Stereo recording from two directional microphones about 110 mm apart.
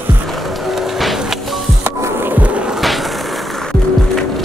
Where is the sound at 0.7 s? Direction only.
Centre (ahead or behind).